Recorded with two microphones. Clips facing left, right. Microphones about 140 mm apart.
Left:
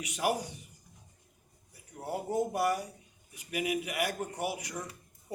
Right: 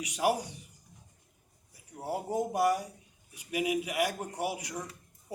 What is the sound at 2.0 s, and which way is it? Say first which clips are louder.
A man's voice: even; 10° right (ahead or behind).